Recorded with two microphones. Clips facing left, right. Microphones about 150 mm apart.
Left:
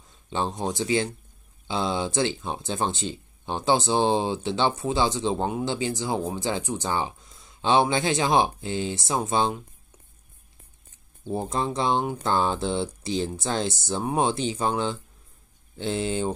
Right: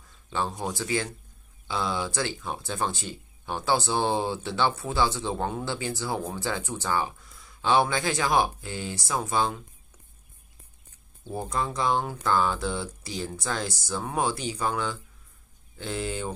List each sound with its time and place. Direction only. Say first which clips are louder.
0.0 s speech: left 2 dB; 25° left (ahead or behind)
11.2 s speech: left 3 dB; 25° left (ahead or behind)